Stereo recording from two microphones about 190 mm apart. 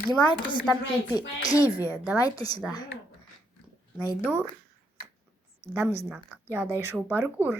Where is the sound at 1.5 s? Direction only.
20° left (ahead or behind).